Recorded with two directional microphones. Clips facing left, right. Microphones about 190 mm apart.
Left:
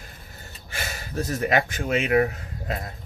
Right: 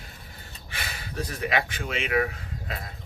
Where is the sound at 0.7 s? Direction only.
45° left (ahead or behind).